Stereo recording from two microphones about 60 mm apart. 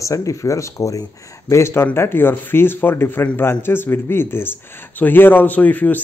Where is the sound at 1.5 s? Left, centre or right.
Left.